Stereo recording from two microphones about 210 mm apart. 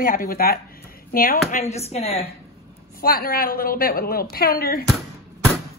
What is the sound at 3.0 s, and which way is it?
A woman's voice, 45° left (ahead or behind).